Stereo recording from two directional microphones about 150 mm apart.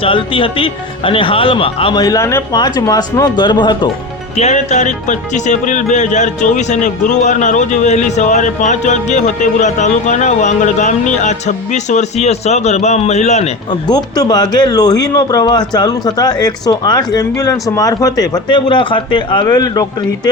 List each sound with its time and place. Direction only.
0.0 s speech: 35° left (ahead or behind)
4.4 s speech: 50° left (ahead or behind)
13.7 s speech: 25° left (ahead or behind)